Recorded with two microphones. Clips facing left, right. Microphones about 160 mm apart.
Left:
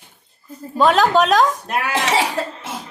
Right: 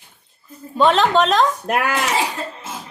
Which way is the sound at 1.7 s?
50° right (ahead or behind).